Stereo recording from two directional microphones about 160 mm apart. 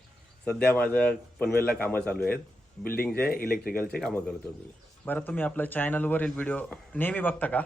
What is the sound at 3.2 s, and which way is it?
Speech, 70° left (ahead or behind).